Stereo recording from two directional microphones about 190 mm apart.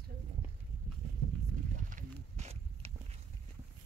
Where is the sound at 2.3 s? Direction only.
35° right (ahead or behind).